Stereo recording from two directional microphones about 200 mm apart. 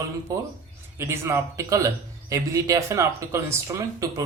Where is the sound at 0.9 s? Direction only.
15° right (ahead or behind).